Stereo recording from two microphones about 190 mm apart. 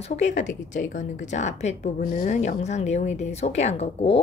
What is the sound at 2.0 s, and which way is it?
Speech, 50° left (ahead or behind).